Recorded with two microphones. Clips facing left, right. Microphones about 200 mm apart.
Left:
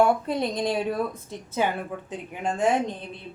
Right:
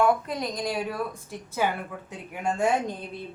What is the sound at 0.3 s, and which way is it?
A woman's voice, 25° left (ahead or behind).